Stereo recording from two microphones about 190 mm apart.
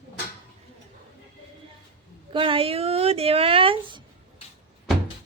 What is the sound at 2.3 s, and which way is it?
Speech, 30° right (ahead or behind).